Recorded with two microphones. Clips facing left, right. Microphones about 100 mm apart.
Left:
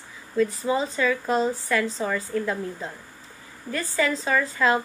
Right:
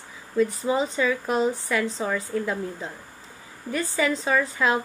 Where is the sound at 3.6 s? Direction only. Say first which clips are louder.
Even; 20° right (ahead or behind).